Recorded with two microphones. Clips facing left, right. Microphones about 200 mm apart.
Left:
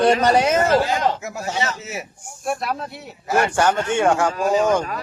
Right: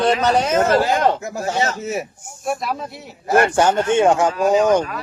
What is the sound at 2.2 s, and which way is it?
Speech, centre (ahead or behind).